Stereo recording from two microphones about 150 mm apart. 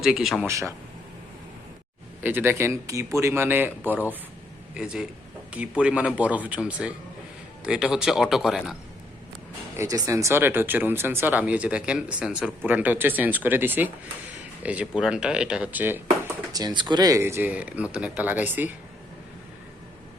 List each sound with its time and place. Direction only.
0.0 s speech: centre (ahead or behind)
0.4 s speech: 20° right (ahead or behind)
2.2 s speech: 15° right (ahead or behind)
9.7 s speech: 20° right (ahead or behind)
16.5 s speech: 25° right (ahead or behind)